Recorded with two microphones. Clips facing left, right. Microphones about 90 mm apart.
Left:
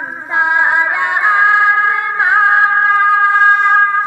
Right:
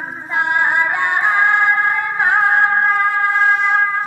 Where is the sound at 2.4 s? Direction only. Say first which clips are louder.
Left 4 dB; 85° left; by 4.0 s 65° left (ahead or behind).